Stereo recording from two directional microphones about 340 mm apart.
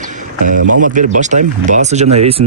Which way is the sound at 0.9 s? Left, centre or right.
Right.